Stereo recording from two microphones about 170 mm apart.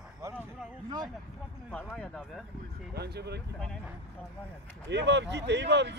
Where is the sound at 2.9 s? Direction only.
75° right (ahead or behind).